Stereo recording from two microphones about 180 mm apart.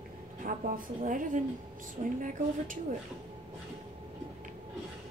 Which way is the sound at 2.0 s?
35° right (ahead or behind).